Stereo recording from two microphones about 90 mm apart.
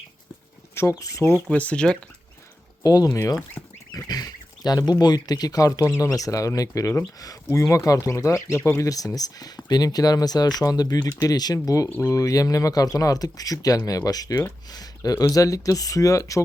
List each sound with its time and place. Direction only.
0.7 s speech: 30° left (ahead or behind)
1.5 s speech: 15° left (ahead or behind)
2.8 s speech: 45° left (ahead or behind)
3.1 s speech: 35° left (ahead or behind)
3.6 s fowl: 5° left (ahead or behind)
3.9 s speech: 45° left (ahead or behind); by 8.9 s 30° left (ahead or behind)
8.9 s speech: 40° left (ahead or behind)